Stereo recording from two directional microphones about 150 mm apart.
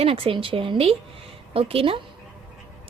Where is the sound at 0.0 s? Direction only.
40° right (ahead or behind).